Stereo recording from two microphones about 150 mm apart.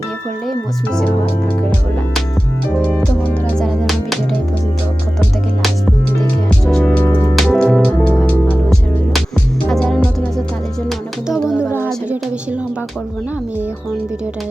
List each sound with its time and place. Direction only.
2.8 s speech: 5° left (ahead or behind)
6.7 s music: 5° left (ahead or behind)
7.1 s music: 25° left (ahead or behind)
7.3 s music: 5° left (ahead or behind)